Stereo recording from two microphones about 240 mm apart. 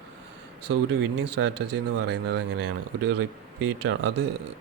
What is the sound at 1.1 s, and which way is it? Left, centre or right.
A man's voice, right.